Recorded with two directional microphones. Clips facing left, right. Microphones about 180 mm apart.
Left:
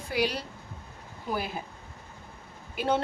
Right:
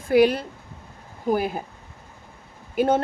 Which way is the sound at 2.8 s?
50° right (ahead or behind).